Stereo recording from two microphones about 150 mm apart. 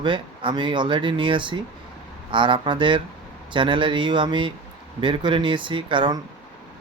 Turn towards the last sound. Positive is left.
turn(degrees=-35)  # may be behind; listen again after turning